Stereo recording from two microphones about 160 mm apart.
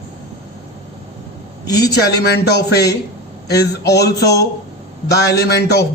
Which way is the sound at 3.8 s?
90° left.